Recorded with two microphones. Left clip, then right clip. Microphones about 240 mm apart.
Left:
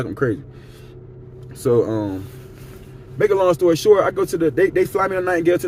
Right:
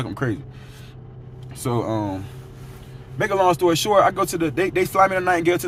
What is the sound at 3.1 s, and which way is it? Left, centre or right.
A man's voice, centre.